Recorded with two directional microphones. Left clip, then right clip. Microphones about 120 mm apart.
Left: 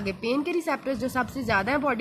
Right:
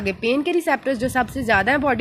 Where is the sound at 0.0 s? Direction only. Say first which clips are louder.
Right 6 dB; 35° right (ahead or behind).